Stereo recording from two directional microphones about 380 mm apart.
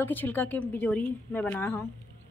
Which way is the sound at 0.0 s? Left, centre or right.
Centre.